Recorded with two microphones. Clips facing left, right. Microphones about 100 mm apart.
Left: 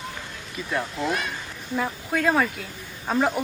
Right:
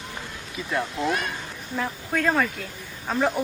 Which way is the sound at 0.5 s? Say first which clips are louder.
Right 1 dB; centre (ahead or behind).